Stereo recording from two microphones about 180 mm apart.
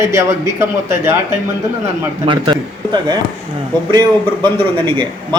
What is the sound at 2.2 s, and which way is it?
Speech, 25° right (ahead or behind).